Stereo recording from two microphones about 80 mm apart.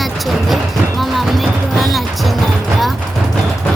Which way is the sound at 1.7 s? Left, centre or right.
Centre.